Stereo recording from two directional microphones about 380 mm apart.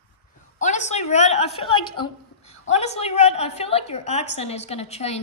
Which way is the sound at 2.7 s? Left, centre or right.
Centre.